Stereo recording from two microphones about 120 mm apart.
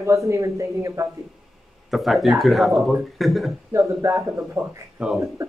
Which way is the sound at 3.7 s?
25° right (ahead or behind).